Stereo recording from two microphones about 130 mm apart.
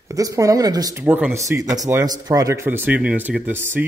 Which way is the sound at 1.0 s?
15° right (ahead or behind).